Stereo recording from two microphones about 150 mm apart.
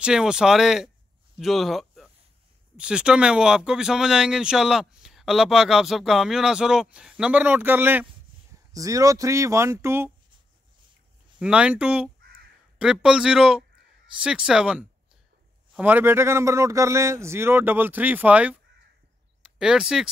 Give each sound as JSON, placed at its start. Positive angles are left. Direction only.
{"t": 0.0, "sound": "speech", "side_deg": -5}
{"t": 8.7, "sound": "speech", "side_deg": -20}
{"t": 11.3, "sound": "a man's voice", "side_deg": -5}